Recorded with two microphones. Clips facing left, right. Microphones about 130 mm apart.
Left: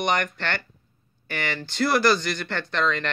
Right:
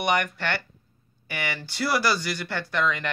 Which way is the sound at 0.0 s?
10° right (ahead or behind).